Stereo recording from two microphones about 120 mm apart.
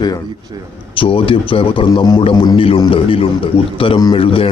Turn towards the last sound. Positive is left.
turn(degrees=50)  # may be behind; listen again after turning